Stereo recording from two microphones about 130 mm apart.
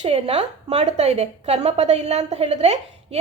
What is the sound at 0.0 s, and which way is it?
A woman's voice, 50° right (ahead or behind).